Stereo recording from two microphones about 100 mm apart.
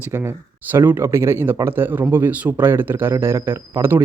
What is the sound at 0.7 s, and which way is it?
Speech, 25° right (ahead or behind).